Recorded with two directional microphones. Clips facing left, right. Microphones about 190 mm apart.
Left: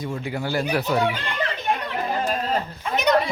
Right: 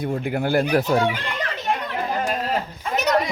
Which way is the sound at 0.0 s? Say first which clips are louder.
Right 4 dB; 55° right (ahead or behind).